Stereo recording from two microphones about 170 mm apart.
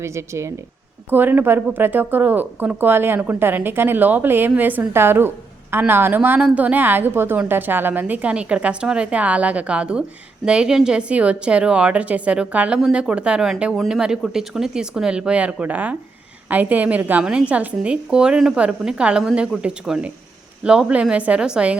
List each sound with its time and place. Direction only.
0.0 s a woman's voice: 15° right (ahead or behind)